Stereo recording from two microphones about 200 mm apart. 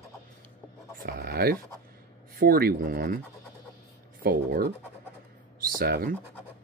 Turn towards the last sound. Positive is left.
turn(degrees=-45)  # may be behind; listen again after turning